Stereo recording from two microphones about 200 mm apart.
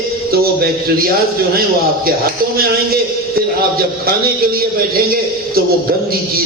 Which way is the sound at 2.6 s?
50° right (ahead or behind).